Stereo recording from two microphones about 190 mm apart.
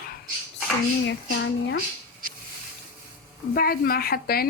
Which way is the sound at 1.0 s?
65° left (ahead or behind).